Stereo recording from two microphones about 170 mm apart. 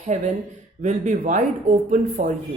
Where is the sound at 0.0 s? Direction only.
45° right (ahead or behind).